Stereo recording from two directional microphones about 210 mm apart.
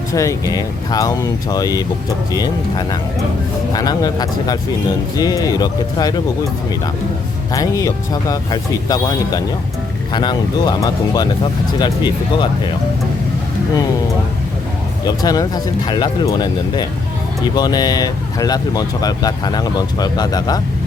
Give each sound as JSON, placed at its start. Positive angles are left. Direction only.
{"t": 0.1, "sound": "speech", "side_deg": 15}
{"t": 7.5, "sound": "speech", "side_deg": 15}
{"t": 15.0, "sound": "speech", "side_deg": 20}